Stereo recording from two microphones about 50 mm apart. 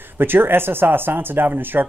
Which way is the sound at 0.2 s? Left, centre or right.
Right.